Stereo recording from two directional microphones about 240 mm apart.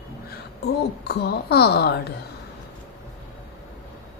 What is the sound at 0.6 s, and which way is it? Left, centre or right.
A woman's voice, left.